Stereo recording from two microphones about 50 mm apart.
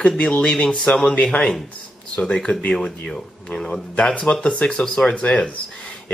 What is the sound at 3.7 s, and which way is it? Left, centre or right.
Speech, left.